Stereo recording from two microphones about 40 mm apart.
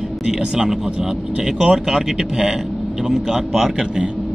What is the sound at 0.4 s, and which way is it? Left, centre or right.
Speech, centre.